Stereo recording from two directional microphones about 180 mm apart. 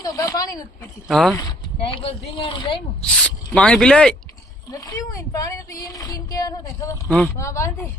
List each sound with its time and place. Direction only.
0.0 s speech: 20° left (ahead or behind)
1.0 s speech: centre (ahead or behind)
1.4 s speech: 25° left (ahead or behind)
3.0 s speech: 5° left (ahead or behind)
4.7 s speech: 20° left (ahead or behind)